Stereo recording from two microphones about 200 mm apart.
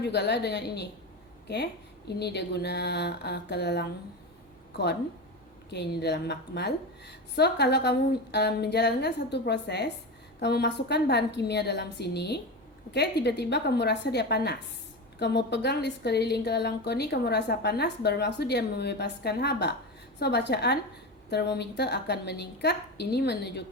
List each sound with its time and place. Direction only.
0.0 s a woman's voice: 55° left (ahead or behind)
5.7 s a woman's voice: 55° left (ahead or behind)